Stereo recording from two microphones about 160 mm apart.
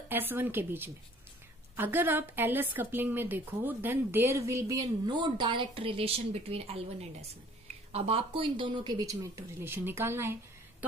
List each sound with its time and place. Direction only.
0.1 s a woman's voice: 10° right (ahead or behind)
9.6 s a woman's voice: 15° right (ahead or behind)